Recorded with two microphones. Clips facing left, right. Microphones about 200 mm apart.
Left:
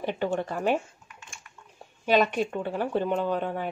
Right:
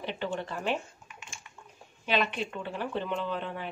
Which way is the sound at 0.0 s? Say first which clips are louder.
Left 6 dB; 45° left (ahead or behind).